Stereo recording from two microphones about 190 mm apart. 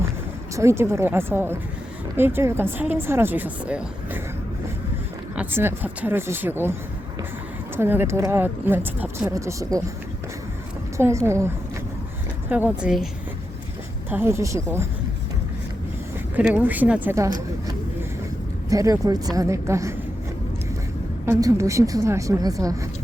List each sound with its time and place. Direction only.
0.5 s speech: 15° right (ahead or behind)
5.3 s speech: 10° right (ahead or behind)
7.8 s speech: 10° right (ahead or behind)
10.9 s speech: 15° right (ahead or behind)
14.1 s speech: 10° right (ahead or behind)
16.3 s speech: 10° right (ahead or behind)
18.7 s speech: 15° right (ahead or behind)
21.2 s speech: 15° right (ahead or behind)